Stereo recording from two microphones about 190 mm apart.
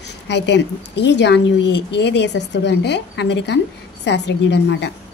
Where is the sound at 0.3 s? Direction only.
65° left (ahead or behind).